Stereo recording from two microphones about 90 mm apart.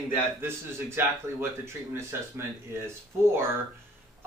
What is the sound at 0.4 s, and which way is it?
A man's voice, 25° right (ahead or behind).